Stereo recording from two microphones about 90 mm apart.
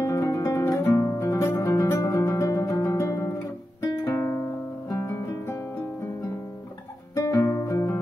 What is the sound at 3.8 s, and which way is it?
Guitar, 30° left (ahead or behind).